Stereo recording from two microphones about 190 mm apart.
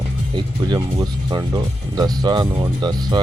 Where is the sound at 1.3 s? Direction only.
20° right (ahead or behind).